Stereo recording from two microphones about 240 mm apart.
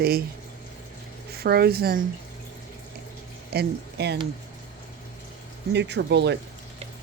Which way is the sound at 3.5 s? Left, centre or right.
Right.